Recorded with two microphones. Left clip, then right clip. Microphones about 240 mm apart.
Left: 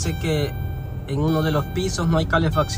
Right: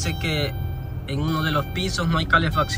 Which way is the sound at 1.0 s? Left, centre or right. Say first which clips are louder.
Left 3 dB; centre.